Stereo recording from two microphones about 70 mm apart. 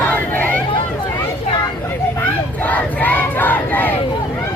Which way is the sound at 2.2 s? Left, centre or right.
Left.